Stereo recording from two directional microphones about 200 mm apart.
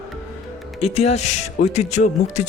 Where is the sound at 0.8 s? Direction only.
30° left (ahead or behind).